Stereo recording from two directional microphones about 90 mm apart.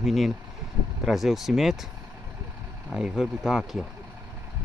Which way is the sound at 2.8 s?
10° right (ahead or behind).